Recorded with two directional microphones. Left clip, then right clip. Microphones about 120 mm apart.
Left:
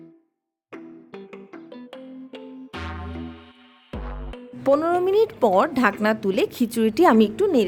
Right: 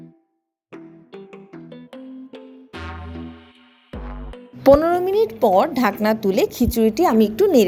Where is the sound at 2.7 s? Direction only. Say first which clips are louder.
Even; centre (ahead or behind).